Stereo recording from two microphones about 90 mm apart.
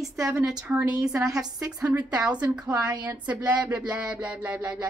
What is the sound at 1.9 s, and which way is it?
Music, 15° right (ahead or behind).